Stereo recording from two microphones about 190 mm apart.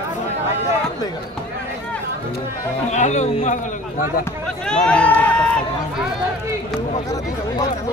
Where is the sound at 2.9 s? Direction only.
40° left (ahead or behind).